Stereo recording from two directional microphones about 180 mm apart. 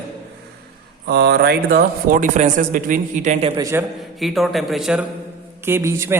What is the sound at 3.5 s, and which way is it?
Speech, 20° right (ahead or behind).